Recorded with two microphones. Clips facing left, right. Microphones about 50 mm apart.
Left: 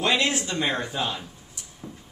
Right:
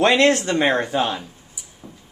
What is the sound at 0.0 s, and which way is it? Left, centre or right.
Speech, right.